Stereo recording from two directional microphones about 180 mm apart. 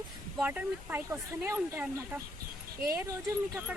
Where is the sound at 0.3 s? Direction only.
10° right (ahead or behind).